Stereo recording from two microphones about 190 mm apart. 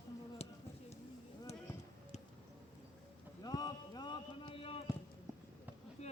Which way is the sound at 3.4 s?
20° left (ahead or behind).